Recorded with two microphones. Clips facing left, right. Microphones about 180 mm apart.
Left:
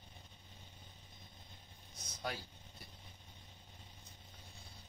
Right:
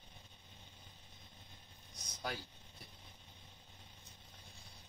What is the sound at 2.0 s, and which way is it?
Vehicle, centre (ahead or behind).